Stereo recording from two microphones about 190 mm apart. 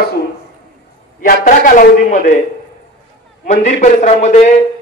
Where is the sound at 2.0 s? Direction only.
40° left (ahead or behind).